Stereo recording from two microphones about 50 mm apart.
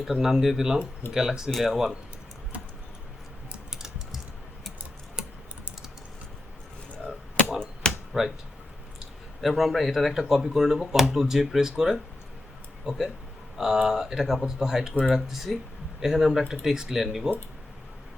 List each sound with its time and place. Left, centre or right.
0.0 s speech: centre
3.7 s typing: centre
7.6 s a sound: centre
8.1 s speech: centre
9.4 s speech: centre